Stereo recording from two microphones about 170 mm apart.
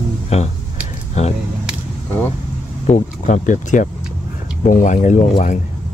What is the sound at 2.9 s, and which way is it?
Speech, 45° left (ahead or behind).